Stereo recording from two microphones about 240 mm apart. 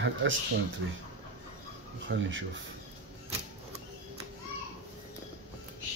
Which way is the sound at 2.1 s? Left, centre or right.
Right.